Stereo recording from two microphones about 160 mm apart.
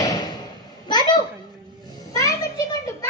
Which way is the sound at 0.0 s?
25° left (ahead or behind).